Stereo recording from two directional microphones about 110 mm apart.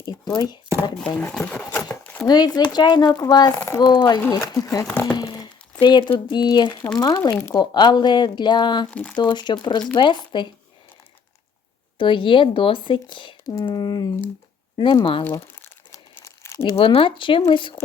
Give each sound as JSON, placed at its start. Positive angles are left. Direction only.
{"t": 0.1, "sound": "speech", "side_deg": 40}
{"t": 0.9, "sound": "speech", "side_deg": 5}
{"t": 2.2, "sound": "speech", "side_deg": 40}
{"t": 5.0, "sound": "crumpling", "side_deg": 40}
{"t": 5.8, "sound": "speech", "side_deg": 50}
{"t": 7.6, "sound": "speech", "side_deg": 40}
{"t": 8.9, "sound": "speech", "side_deg": 10}
{"t": 9.2, "sound": "speech", "side_deg": 40}
{"t": 11.9, "sound": "speech", "side_deg": 50}
{"t": 15.9, "sound": "crumpling", "side_deg": 25}
{"t": 16.7, "sound": "speech", "side_deg": 55}